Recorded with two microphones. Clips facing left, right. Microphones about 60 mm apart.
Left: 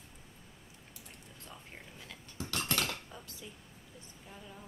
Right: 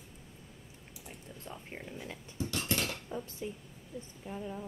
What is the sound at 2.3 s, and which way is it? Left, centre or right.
Cutlery, left.